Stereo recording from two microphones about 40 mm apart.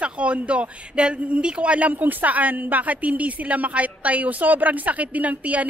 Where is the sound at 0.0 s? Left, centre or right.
Right.